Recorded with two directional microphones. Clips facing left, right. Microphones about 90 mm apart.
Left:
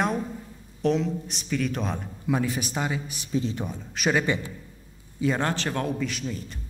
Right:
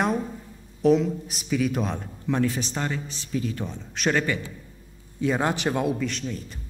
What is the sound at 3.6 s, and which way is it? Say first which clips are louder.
A man's voice: even; 5° left (ahead or behind).